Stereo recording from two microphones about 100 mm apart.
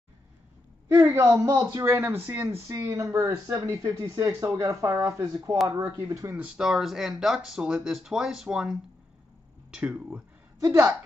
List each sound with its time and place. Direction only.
0.9 s speech: 25° right (ahead or behind)
2.7 s speech: 35° right (ahead or behind)
6.3 s speech: 10° right (ahead or behind)
10.6 s a woman's voice: 30° right (ahead or behind)